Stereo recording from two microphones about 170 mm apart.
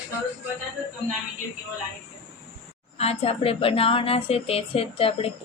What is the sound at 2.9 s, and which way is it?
Speech, 35° left (ahead or behind).